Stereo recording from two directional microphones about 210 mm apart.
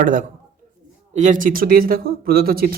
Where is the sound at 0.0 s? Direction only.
40° right (ahead or behind).